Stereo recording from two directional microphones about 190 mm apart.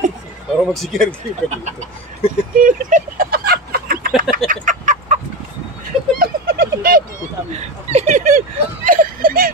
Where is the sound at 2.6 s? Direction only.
45° right (ahead or behind).